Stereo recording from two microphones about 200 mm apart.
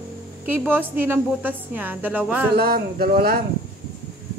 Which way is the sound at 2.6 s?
50° right (ahead or behind).